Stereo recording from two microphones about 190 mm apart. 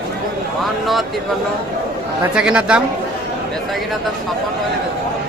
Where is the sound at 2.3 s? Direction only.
5° right (ahead or behind).